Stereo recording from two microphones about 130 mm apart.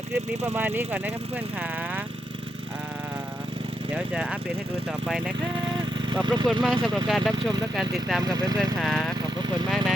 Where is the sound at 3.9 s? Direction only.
10° right (ahead or behind).